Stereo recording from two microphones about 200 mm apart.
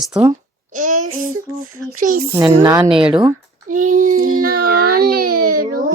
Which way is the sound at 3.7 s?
40° right (ahead or behind).